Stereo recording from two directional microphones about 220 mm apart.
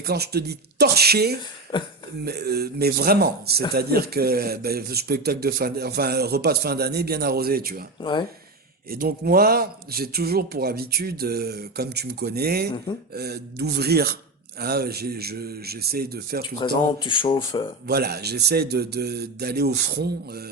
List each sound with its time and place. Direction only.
0.0 s a man's voice: 45° right (ahead or behind)
1.7 s speech: 20° left (ahead or behind)
2.2 s a man's voice: 45° right (ahead or behind)
8.9 s a man's voice: 45° right (ahead or behind)
16.6 s speech: 20° left (ahead or behind)
17.8 s a man's voice: 45° right (ahead or behind)